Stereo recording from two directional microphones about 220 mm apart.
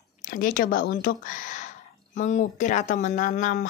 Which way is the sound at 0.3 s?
40° left (ahead or behind).